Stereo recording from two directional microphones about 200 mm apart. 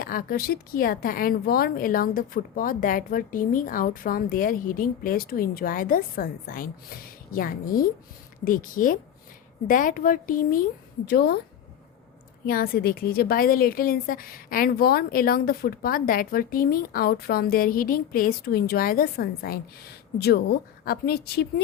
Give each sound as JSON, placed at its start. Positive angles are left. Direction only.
{"t": 0.0, "sound": "a woman's voice", "side_deg": 45}
{"t": 12.5, "sound": "a woman's voice", "side_deg": 50}